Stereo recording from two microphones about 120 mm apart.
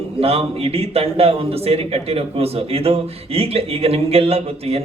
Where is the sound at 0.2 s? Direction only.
55° right (ahead or behind).